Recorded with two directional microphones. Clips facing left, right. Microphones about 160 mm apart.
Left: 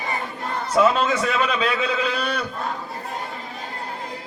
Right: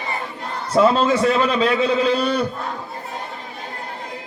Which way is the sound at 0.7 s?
30° right (ahead or behind).